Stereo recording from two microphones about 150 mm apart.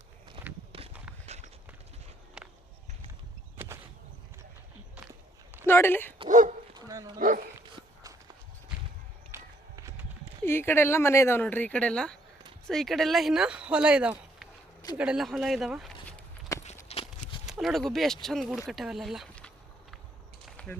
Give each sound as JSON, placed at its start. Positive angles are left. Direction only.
{"t": 0.4, "sound": "walk", "side_deg": -40}
{"t": 2.4, "sound": "walk", "side_deg": -5}
{"t": 5.6, "sound": "speech", "side_deg": 15}
{"t": 6.2, "sound": "speech", "side_deg": -60}
{"t": 6.7, "sound": "bow-wow", "side_deg": -25}
{"t": 7.2, "sound": "dog", "side_deg": -65}
{"t": 9.3, "sound": "run", "side_deg": -20}
{"t": 10.4, "sound": "speech", "side_deg": 15}
{"t": 16.9, "sound": "clip-clop", "side_deg": 40}
{"t": 17.4, "sound": "speech", "side_deg": 0}
{"t": 20.4, "sound": "a sound", "side_deg": 5}